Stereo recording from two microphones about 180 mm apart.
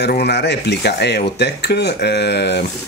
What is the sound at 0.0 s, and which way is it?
Speech, 70° left (ahead or behind).